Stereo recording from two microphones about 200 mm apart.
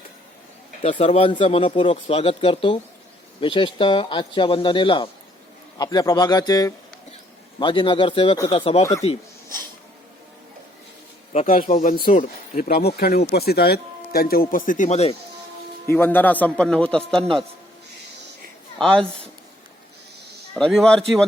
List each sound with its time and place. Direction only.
0.8 s speech: 30° left (ahead or behind)
8.8 s a man's voice: 15° left (ahead or behind)
11.3 s speech: 45° left (ahead or behind)
15.9 s a man's voice: 10° left (ahead or behind)
18.8 s a man's voice: 5° left (ahead or behind)
20.5 s a man's voice: 5° left (ahead or behind)